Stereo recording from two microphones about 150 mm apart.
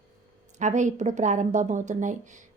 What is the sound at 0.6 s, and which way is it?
A woman's voice, 55° right (ahead or behind).